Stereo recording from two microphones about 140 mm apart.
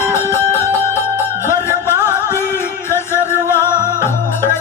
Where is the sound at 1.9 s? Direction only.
15° right (ahead or behind).